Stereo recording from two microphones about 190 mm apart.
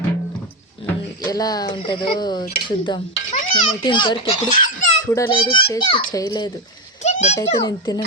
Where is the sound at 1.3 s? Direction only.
20° left (ahead or behind).